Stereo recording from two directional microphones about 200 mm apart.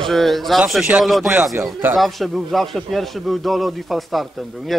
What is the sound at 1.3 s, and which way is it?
Speech, 10° right (ahead or behind).